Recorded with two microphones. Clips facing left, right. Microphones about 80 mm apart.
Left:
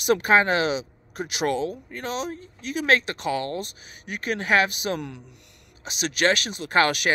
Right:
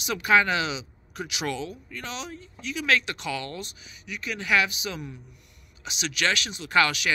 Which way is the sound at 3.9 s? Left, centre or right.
Left.